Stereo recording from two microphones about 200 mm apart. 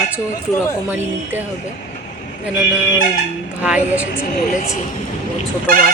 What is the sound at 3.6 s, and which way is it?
Speech, 5° right (ahead or behind).